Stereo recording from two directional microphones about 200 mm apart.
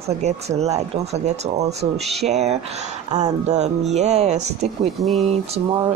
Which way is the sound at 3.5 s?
35° right (ahead or behind).